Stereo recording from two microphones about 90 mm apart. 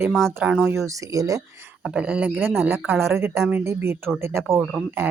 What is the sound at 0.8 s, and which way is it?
Speech, 40° right (ahead or behind).